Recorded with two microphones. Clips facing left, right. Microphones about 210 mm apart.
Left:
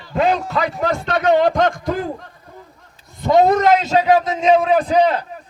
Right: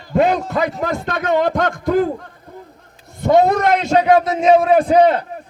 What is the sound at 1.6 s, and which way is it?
Speech, 55° right (ahead or behind).